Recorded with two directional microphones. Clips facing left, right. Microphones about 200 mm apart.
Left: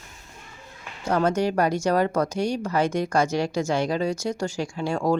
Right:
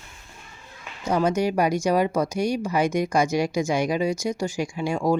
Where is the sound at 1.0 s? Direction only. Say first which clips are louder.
Even; 10° right (ahead or behind).